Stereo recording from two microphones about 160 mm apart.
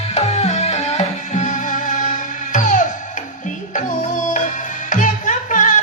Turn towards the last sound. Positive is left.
turn(degrees=50)  # may be behind; listen again after turning